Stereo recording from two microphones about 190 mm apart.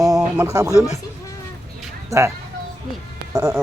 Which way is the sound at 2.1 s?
15° right (ahead or behind).